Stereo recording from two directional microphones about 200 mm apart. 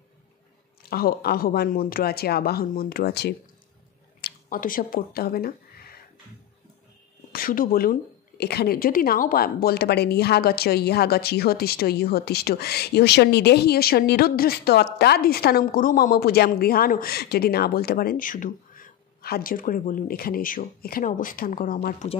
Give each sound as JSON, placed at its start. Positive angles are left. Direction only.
{"t": 0.8, "sound": "speech", "side_deg": 50}
{"t": 4.2, "sound": "speech", "side_deg": 45}
{"t": 7.3, "sound": "speech", "side_deg": 45}